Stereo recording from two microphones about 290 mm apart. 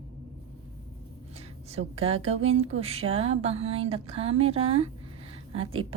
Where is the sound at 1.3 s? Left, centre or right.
Right.